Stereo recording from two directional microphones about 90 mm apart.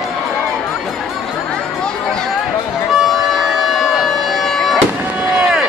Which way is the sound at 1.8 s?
10° left (ahead or behind).